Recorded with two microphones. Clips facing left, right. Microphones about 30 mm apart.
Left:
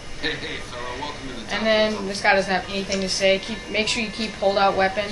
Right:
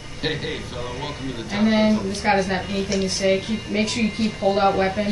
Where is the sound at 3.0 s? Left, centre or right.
Left.